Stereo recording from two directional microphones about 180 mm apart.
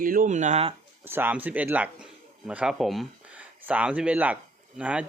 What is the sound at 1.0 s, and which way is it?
Speech, 10° right (ahead or behind).